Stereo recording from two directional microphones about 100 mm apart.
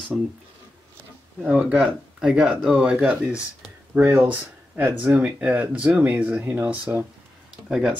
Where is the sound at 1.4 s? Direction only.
10° right (ahead or behind).